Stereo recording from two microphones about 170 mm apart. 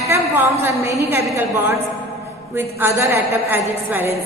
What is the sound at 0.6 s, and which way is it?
A woman's voice, 15° right (ahead or behind).